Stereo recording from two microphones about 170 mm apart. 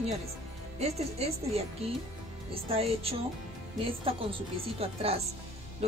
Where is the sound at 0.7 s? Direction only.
35° right (ahead or behind).